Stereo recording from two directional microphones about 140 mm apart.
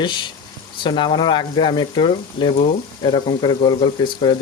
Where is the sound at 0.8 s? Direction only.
35° left (ahead or behind).